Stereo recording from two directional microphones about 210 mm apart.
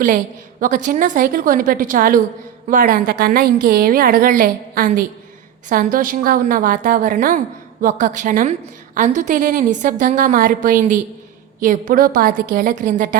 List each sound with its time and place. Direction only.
0.6 s a woman's voice: 40° right (ahead or behind)